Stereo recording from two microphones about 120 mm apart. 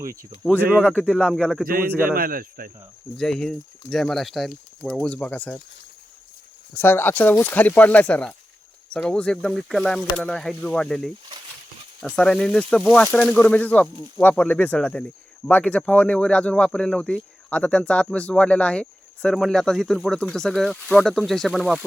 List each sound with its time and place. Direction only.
0.6 s speech: 15° right (ahead or behind)
0.9 s speech: 5° left (ahead or behind)
3.2 s speech: 5° left (ahead or behind)
6.7 s speech: 20° left (ahead or behind); by 21.8 s centre (ahead or behind)